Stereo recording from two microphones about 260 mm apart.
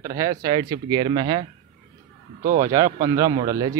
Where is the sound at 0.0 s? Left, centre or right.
Centre.